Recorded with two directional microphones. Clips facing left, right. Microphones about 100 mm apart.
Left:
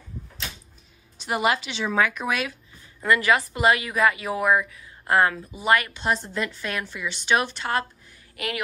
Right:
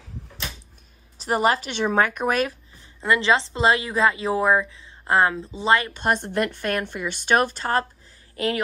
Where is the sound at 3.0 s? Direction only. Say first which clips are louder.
Right 1 dB; 25° right (ahead or behind).